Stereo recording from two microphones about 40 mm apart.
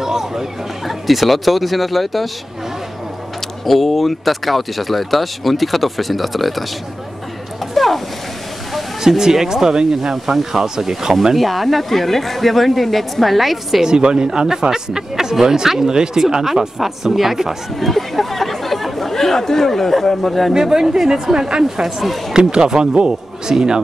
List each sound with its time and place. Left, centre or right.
0.0 s speech: centre
3.6 s speech: centre
7.7 s a sound: centre
9.0 s speech: centre
11.3 s speech: centre
13.8 s speech: centre
20.5 s speech: centre
21.8 s speech: centre
22.3 s a man's voice: centre